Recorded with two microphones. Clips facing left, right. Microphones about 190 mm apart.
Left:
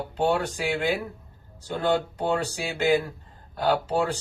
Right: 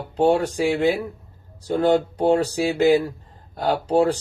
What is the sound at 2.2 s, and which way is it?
Speech, 40° right (ahead or behind).